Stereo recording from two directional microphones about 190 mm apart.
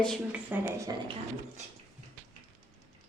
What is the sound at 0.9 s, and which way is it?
Speech, 20° right (ahead or behind).